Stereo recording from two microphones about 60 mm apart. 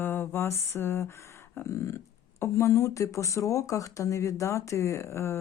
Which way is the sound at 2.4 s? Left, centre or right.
Left.